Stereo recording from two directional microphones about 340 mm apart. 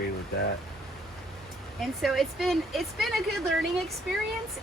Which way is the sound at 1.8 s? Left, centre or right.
Centre.